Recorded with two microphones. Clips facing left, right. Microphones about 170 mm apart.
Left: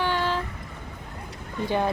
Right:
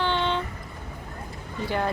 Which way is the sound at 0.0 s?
5° left (ahead or behind).